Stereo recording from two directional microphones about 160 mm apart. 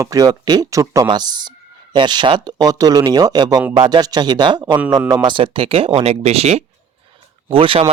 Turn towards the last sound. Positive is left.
turn(degrees=-35)  # may be behind; listen again after turning